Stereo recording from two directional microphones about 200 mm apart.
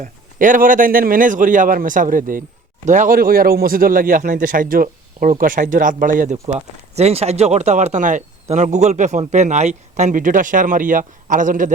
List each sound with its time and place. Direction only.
0.0 s speech: 40° right (ahead or behind)